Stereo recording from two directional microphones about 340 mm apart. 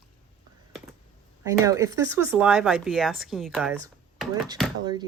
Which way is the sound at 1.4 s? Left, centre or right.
Centre.